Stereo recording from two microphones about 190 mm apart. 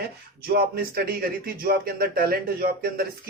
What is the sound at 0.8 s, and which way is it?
Speech, 50° right (ahead or behind).